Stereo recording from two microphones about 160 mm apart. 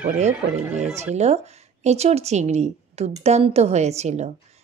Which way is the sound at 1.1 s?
45° right (ahead or behind).